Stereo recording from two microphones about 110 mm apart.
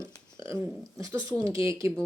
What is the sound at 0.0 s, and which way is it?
Speech, 25° right (ahead or behind).